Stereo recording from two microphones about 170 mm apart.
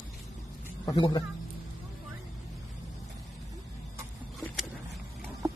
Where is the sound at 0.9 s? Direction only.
30° left (ahead or behind).